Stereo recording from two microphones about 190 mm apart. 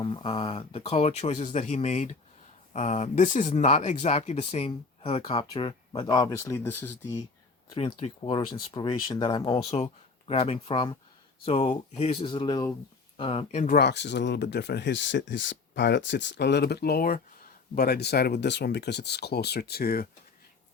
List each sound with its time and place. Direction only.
0.0 s speech: 25° left (ahead or behind)
7.7 s speech: 30° left (ahead or behind)
13.7 s speech: 65° left (ahead or behind)